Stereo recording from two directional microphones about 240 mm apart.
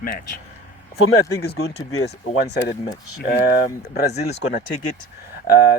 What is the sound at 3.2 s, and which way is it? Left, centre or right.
Speech, left.